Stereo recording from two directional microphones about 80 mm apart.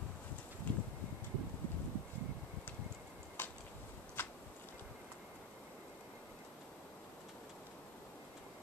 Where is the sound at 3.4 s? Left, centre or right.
Left.